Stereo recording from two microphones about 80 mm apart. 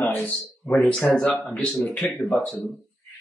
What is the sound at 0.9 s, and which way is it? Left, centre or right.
A man's voice, centre.